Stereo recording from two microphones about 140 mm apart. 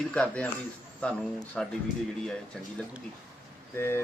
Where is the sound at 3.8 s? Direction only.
15° left (ahead or behind).